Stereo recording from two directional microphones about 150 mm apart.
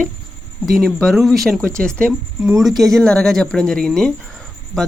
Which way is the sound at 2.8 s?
Centre (ahead or behind).